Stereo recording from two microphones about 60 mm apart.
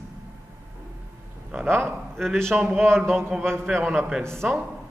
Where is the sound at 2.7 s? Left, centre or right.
Right.